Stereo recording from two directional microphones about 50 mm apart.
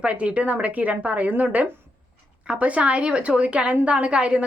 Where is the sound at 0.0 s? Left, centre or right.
Right.